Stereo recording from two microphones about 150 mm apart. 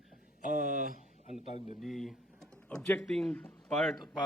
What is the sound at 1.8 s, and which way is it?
Speech, centre (ahead or behind).